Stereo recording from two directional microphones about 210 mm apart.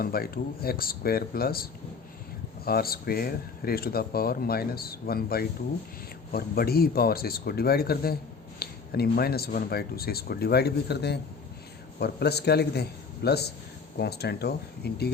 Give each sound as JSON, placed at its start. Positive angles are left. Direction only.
{"t": 0.0, "sound": "speech", "side_deg": 45}
{"t": 2.6, "sound": "speech", "side_deg": 45}